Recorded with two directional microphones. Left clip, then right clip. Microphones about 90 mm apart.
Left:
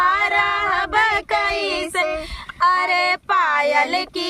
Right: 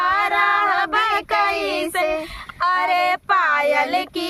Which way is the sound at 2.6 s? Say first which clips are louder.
Left 1 dB; 35° left (ahead or behind).